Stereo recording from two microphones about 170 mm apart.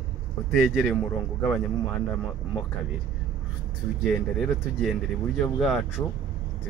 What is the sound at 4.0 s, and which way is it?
Speech, centre (ahead or behind).